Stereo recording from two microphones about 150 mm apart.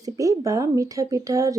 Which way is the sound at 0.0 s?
25° right (ahead or behind).